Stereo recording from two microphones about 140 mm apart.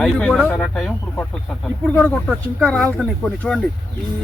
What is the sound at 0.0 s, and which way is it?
Speech, 5° left (ahead or behind).